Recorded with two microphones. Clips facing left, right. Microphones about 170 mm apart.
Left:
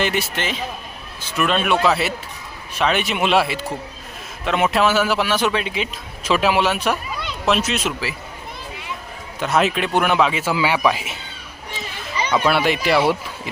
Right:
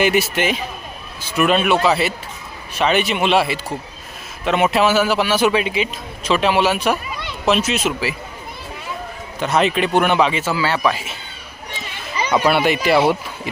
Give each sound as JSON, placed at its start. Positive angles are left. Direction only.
{"t": 0.0, "sound": "a man's voice", "side_deg": -10}
{"t": 9.4, "sound": "a man's voice", "side_deg": 0}
{"t": 10.5, "sound": "speech", "side_deg": 15}
{"t": 12.5, "sound": "a man's voice", "side_deg": 0}